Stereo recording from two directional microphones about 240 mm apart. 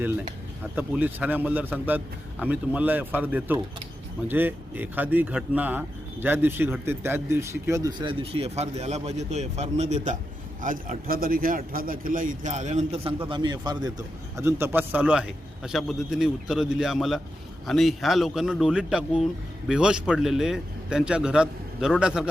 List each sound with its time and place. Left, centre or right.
0.8 s a man's voice: centre